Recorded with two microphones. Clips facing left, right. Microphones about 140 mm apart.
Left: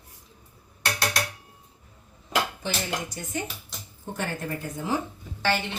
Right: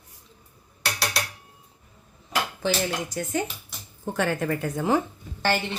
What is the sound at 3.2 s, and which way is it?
Speech, 90° right.